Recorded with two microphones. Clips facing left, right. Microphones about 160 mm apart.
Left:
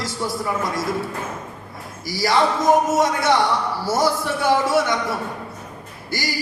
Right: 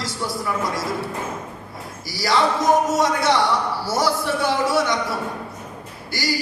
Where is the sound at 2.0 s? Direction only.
25° left (ahead or behind).